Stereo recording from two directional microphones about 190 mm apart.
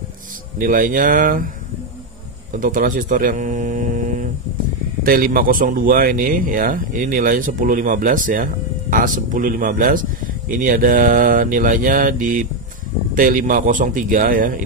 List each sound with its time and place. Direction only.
0.6 s speech: 45° right (ahead or behind)
2.5 s speech: 45° right (ahead or behind)